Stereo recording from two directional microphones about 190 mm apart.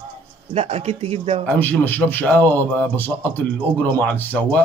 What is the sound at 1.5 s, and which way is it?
A man's voice, 10° left (ahead or behind).